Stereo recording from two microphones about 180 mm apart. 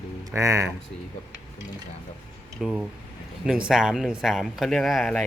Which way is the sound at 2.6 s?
5° right (ahead or behind).